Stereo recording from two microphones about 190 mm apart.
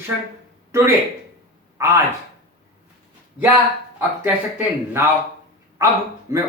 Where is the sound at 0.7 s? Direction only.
15° right (ahead or behind).